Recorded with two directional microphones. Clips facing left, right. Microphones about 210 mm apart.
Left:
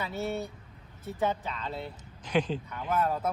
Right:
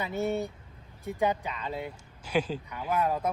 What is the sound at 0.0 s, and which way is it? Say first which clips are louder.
Speech: right 3 dB; 15° right (ahead or behind).